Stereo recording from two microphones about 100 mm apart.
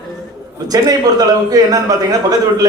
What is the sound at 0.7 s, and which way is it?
A man's voice, 40° right (ahead or behind).